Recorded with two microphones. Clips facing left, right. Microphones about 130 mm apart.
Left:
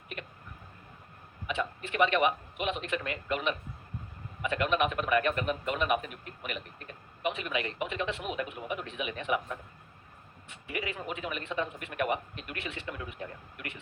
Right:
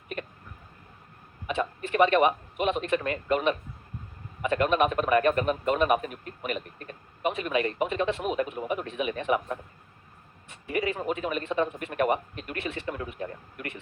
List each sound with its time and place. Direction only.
1.5 s a man's voice: 40° right (ahead or behind)